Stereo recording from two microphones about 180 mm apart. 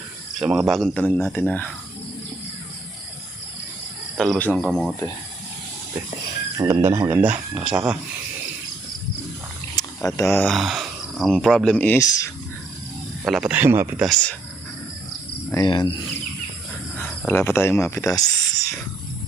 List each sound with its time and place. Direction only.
0.3 s speech: centre (ahead or behind)
4.2 s speech: 5° left (ahead or behind)
6.6 s speech: 15° right (ahead or behind)
10.2 s speech: 15° left (ahead or behind)
10.4 s speech: centre (ahead or behind)
13.2 s speech: 5° right (ahead or behind)
14.0 s speech: centre (ahead or behind)
15.5 s cricket: 25° left (ahead or behind)
17.0 s a sound: 10° left (ahead or behind)